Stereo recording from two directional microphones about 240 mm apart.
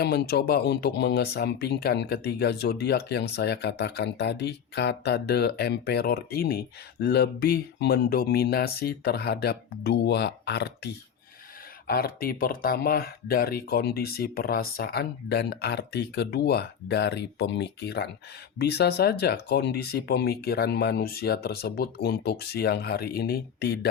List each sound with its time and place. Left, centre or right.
0.0 s speech: left
11.9 s speech: left